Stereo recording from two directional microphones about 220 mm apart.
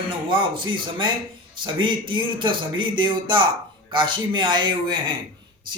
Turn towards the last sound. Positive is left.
turn(degrees=-20)  # may be behind; listen again after turning